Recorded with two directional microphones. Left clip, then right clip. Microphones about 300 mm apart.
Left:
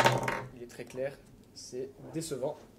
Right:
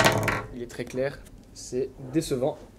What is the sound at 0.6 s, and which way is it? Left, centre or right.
Speech, right.